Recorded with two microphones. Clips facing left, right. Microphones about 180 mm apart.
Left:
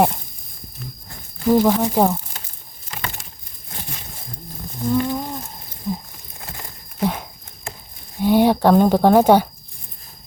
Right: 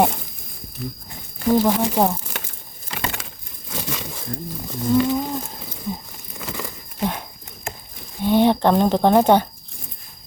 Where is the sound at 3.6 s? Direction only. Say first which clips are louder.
Right 7 dB; 90° right.